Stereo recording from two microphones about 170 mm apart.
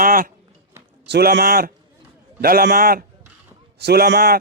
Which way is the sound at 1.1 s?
70° right (ahead or behind).